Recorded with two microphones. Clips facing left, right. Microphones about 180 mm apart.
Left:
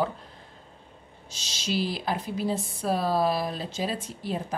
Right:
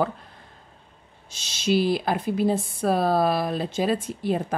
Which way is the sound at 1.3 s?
55° right (ahead or behind).